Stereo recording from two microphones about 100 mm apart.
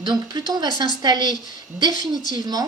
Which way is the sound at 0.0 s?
45° right (ahead or behind).